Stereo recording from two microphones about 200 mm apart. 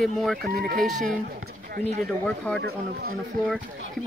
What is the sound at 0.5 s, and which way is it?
Speech, 50° right (ahead or behind).